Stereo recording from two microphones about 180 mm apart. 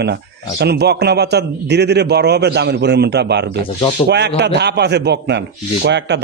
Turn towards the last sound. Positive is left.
turn(degrees=-75)  # may be behind; listen again after turning